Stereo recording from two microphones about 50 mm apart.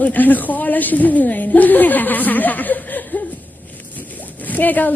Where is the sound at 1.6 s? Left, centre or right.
Left.